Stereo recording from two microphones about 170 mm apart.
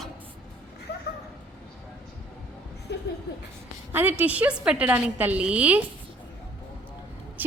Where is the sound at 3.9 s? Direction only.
10° right (ahead or behind).